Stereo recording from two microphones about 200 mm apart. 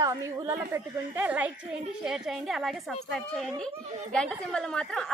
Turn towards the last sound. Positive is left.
turn(degrees=5)  # may be behind; listen again after turning